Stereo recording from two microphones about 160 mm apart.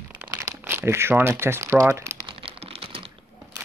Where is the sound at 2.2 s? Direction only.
35° right (ahead or behind).